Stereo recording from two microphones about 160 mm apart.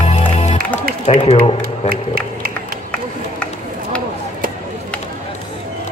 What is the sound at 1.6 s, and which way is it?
Music, 65° right (ahead or behind).